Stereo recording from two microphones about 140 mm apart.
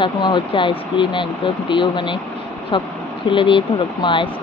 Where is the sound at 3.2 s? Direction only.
35° left (ahead or behind).